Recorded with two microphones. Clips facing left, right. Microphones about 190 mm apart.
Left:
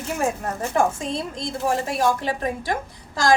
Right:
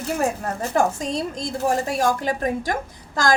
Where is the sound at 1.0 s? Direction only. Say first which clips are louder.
Right 2 dB; 40° right (ahead or behind).